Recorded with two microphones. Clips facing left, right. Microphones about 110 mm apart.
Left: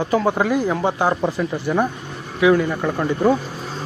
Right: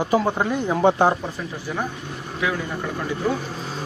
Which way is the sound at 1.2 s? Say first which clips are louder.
Left 9 dB; 85° left.